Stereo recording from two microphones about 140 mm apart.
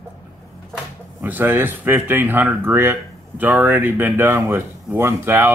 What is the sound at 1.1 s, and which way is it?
Speech, 15° right (ahead or behind).